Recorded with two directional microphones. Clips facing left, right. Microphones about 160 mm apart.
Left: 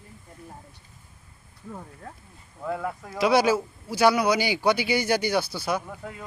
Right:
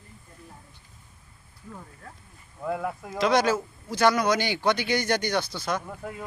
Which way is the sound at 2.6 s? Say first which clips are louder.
Even; 5° right (ahead or behind).